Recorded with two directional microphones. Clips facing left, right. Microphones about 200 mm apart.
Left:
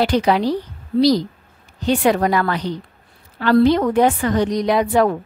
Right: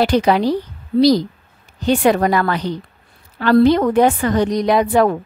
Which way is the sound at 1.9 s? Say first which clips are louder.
Right 2 dB; 50° right (ahead or behind).